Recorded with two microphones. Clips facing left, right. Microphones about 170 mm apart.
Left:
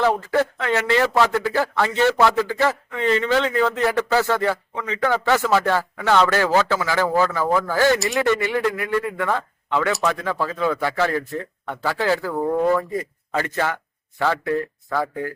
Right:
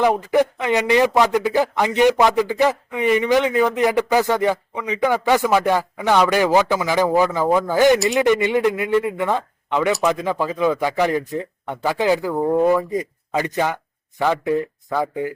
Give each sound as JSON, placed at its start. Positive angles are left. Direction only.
{"t": 0.0, "sound": "a man's voice", "side_deg": -15}